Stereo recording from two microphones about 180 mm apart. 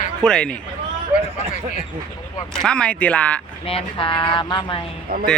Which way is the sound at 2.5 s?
5° left (ahead or behind).